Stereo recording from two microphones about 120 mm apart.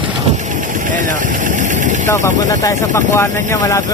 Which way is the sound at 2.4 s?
30° left (ahead or behind).